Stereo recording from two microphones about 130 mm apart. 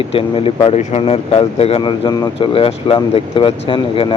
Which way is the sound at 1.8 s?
35° left (ahead or behind).